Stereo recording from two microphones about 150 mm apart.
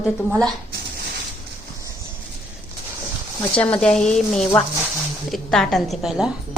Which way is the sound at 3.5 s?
5° left (ahead or behind).